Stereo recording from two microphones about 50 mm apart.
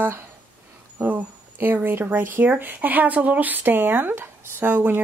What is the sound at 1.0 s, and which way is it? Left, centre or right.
Speech, right.